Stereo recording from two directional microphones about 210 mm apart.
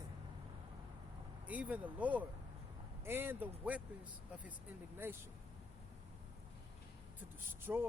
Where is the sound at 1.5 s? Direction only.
5° right (ahead or behind).